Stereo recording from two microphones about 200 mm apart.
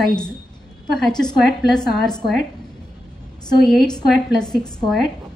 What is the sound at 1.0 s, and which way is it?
Speech, 5° left (ahead or behind).